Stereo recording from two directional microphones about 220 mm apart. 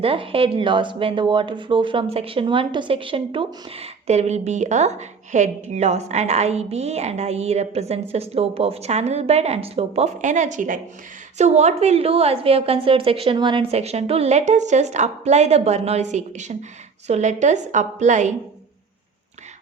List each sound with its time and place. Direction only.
0.0 s a woman's voice: 25° right (ahead or behind)